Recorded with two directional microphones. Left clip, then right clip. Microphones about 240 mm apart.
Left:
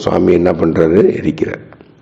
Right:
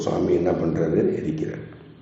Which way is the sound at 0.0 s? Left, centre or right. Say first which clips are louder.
Left 10 dB; left.